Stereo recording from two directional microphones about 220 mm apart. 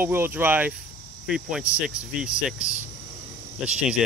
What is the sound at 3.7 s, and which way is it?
Speech, 5° right (ahead or behind).